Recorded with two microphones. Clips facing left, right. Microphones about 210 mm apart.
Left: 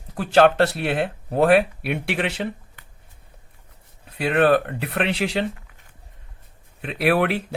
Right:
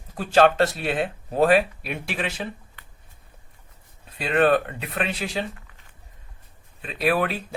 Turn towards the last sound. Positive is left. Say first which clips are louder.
# left 3 dB
turn(degrees=70)  # may be behind; listen again after turning